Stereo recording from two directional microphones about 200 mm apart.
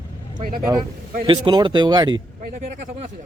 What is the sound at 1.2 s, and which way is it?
Speech, 25° right (ahead or behind).